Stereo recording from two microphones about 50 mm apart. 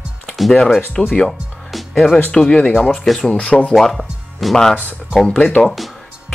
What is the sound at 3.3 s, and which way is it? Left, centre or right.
Speech, left.